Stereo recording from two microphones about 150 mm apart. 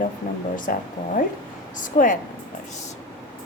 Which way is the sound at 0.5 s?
60° left (ahead or behind).